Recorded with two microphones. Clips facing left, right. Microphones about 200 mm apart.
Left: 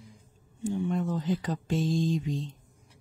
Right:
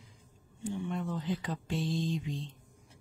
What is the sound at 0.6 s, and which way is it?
Speech, 30° left (ahead or behind).